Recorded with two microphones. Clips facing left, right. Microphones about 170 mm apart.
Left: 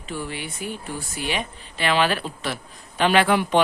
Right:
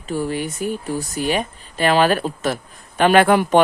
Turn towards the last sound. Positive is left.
turn(degrees=-45)  # may be behind; listen again after turning